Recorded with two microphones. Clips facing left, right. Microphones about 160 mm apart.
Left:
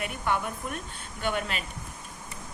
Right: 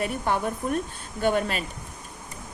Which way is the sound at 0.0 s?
35° right (ahead or behind).